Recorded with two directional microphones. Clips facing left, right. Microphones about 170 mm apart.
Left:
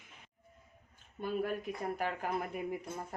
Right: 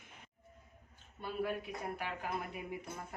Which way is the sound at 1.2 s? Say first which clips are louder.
Left 3 dB; 45° left (ahead or behind).